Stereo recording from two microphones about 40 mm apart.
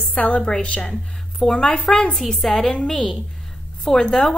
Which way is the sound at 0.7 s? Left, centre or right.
Left.